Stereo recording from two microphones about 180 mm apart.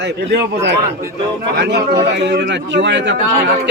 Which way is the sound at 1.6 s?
70° right (ahead or behind).